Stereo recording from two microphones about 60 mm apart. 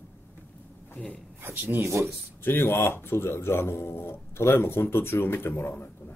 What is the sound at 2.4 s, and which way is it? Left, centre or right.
Speech, left.